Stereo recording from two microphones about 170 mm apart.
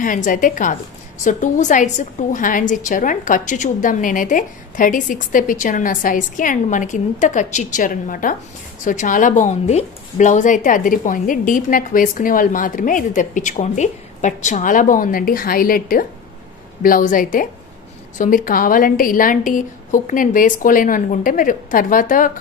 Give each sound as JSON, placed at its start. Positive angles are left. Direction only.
{"t": 0.0, "sound": "a woman's voice", "side_deg": 50}